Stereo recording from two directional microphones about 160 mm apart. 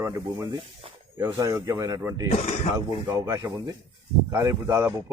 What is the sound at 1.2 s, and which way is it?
Speech, 20° right (ahead or behind).